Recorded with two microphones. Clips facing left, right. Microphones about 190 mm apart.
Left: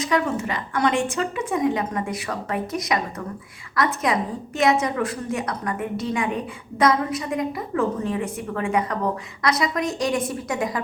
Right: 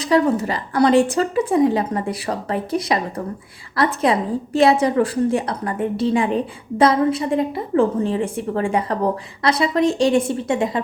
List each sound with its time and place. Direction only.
0.0 s a woman's voice: 35° right (ahead or behind)